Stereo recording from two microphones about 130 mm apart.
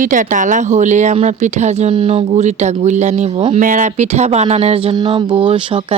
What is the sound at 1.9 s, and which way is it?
Speech, 45° right (ahead or behind).